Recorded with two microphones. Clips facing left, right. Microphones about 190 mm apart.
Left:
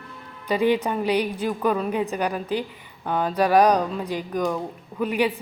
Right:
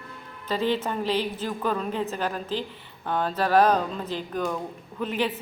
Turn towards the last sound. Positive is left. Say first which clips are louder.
# left 4 dB
turn(degrees=10)  # may be behind; listen again after turning